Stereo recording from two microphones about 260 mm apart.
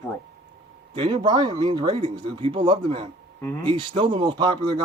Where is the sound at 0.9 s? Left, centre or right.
Centre.